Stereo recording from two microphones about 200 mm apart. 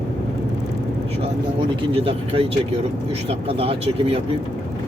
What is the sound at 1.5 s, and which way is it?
Speech, 30° right (ahead or behind).